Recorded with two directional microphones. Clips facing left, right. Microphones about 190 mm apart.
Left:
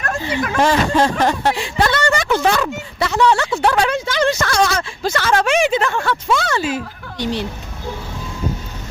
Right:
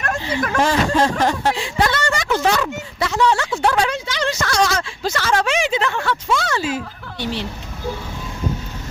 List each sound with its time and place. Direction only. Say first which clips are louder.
0.6 s speech: left 2 dB; 60° left (ahead or behind)
7.2 s speech: left 3 dB; 15° left (ahead or behind)